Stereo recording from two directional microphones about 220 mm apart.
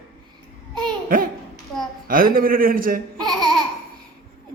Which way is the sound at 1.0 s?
40° right (ahead or behind).